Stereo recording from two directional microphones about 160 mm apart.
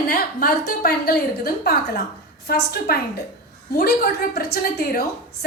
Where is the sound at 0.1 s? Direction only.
65° left (ahead or behind).